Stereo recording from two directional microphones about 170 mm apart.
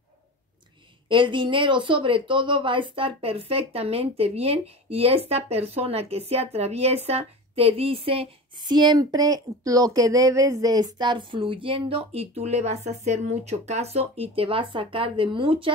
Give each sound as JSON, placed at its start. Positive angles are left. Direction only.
{"t": 1.0, "sound": "speech", "side_deg": -30}